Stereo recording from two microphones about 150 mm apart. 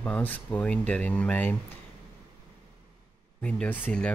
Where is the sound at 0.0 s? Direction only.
10° left (ahead or behind).